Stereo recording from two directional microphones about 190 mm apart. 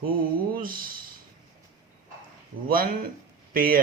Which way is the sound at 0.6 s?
50° right (ahead or behind).